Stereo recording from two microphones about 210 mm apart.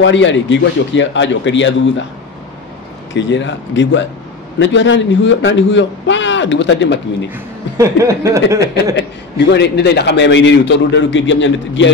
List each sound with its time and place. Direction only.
0.0 s a man's voice: 60° left (ahead or behind)
3.2 s a man's voice: 60° left (ahead or behind)
7.2 s speech: 15° right (ahead or behind)
9.5 s a man's voice: 55° left (ahead or behind)